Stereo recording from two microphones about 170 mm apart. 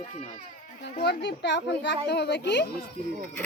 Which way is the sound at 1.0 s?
80° left.